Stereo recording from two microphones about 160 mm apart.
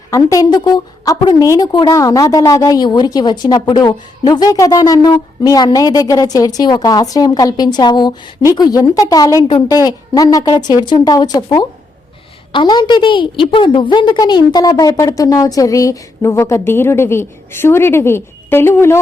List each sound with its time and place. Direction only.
0.1 s a woman's voice: 20° left (ahead or behind)